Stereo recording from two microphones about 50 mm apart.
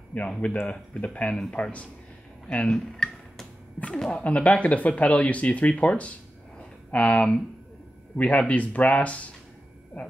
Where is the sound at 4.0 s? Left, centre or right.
Left.